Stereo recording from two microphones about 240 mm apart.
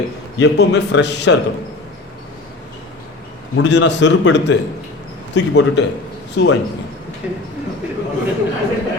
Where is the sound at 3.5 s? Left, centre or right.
Left.